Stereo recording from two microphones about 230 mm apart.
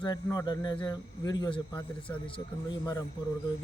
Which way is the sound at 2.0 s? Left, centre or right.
Centre.